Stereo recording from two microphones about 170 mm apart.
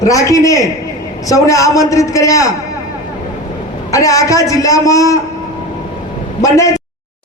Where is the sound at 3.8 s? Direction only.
20° left (ahead or behind).